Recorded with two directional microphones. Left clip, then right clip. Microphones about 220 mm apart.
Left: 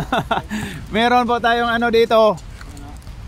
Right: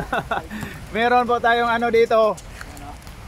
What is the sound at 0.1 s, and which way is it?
Speech, 40° left (ahead or behind).